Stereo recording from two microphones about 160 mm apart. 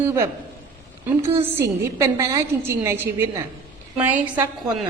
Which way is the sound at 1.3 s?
15° right (ahead or behind).